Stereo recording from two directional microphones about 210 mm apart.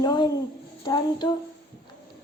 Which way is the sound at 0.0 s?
20° left (ahead or behind).